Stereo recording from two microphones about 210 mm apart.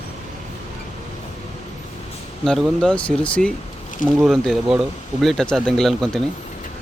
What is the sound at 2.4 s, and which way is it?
Speech, centre (ahead or behind).